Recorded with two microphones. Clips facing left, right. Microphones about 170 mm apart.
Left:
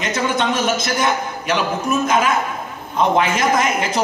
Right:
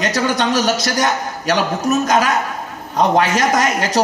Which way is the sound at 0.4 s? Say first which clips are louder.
Right 2 dB; 40° right (ahead or behind).